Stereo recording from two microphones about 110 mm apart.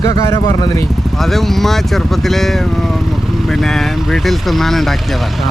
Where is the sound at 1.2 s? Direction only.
Centre (ahead or behind).